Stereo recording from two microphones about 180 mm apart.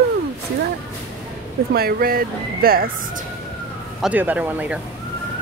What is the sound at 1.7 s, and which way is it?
Speech, 60° right (ahead or behind).